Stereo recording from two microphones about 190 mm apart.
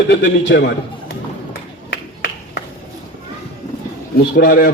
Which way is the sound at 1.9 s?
65° left (ahead or behind).